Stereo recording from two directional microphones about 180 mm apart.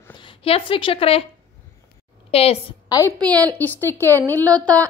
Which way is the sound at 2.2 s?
35° left (ahead or behind).